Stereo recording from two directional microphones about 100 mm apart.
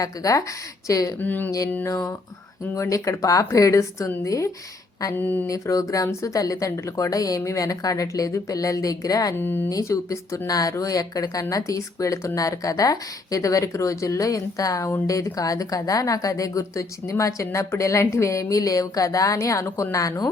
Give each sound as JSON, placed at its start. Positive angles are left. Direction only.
{"t": 0.0, "sound": "speech", "side_deg": 35}
{"t": 1.2, "sound": "speech", "side_deg": 20}
{"t": 1.5, "sound": "speech", "side_deg": 35}
{"t": 5.1, "sound": "speech", "side_deg": 20}
{"t": 5.5, "sound": "speech", "side_deg": 35}
{"t": 9.4, "sound": "speech", "side_deg": 20}
{"t": 9.6, "sound": "speech", "side_deg": 35}